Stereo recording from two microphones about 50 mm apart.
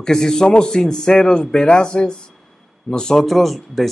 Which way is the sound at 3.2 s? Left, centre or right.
Centre.